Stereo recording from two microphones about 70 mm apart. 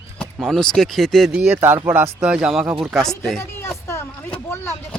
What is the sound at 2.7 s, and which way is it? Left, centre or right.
Speech, centre.